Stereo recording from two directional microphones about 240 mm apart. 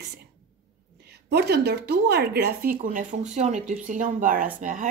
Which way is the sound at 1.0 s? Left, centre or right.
Right.